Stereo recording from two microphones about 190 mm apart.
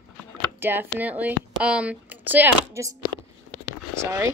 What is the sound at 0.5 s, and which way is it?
Speech, 10° right (ahead or behind).